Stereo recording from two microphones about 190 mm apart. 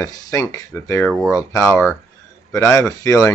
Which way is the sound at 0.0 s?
15° left (ahead or behind).